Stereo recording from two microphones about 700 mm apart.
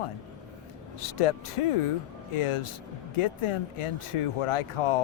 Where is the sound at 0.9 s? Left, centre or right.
Left.